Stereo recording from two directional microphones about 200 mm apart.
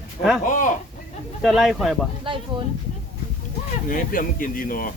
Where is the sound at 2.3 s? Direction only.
25° right (ahead or behind).